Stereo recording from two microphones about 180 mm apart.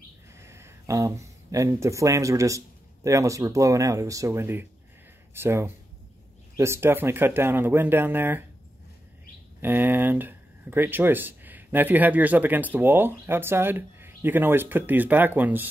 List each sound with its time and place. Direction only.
0.3 s speech: 15° right (ahead or behind)
9.6 s speech: 10° right (ahead or behind)